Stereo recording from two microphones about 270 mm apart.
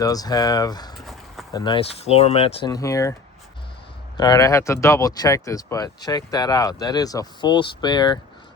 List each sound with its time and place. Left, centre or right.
0.0 s speech: centre
1.0 s run: centre
1.5 s speech: centre
4.2 s speech: centre